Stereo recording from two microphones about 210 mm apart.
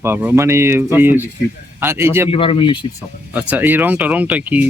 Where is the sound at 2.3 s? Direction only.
25° left (ahead or behind).